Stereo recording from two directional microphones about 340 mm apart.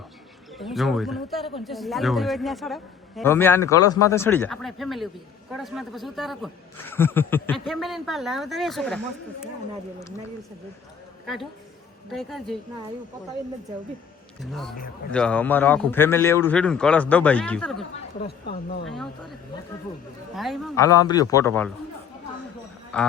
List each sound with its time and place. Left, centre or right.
0.5 s a man's voice: centre
12.1 s a man's voice: centre
15.1 s a man's voice: centre
18.2 s speech: left
20.3 s speech: centre
22.9 s a man's voice: centre